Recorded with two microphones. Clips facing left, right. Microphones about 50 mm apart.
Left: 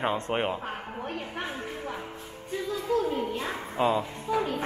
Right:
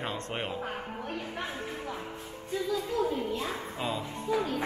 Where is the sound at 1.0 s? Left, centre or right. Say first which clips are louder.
Left 3 dB; left.